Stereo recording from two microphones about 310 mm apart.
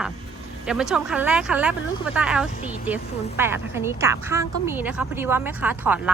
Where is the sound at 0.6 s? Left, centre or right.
Centre.